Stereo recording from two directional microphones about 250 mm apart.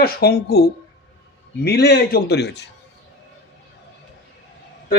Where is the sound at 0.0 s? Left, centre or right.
Left.